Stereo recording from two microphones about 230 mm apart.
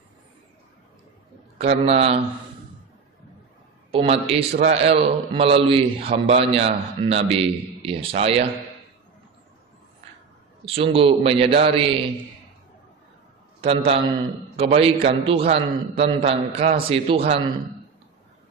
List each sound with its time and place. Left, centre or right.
1.6 s a man's voice: right
3.9 s a man's voice: right
10.6 s a man's voice: right
13.6 s a man's voice: right